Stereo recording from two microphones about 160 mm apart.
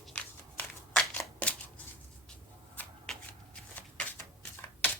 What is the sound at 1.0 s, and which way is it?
Shuffling cards, 5° left (ahead or behind).